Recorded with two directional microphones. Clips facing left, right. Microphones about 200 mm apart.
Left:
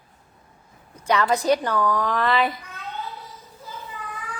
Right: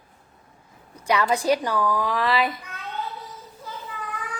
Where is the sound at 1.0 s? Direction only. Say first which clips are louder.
Left 1 dB; 10° right (ahead or behind).